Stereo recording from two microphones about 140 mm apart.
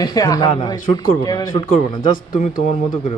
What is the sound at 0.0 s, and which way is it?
Speech, 25° left (ahead or behind).